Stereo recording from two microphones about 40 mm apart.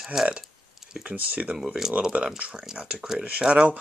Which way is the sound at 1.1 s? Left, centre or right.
Right.